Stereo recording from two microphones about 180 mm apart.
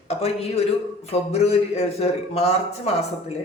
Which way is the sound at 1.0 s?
35° left (ahead or behind).